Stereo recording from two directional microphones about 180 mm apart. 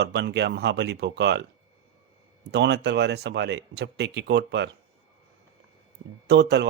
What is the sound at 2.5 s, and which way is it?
Speech, 70° right (ahead or behind).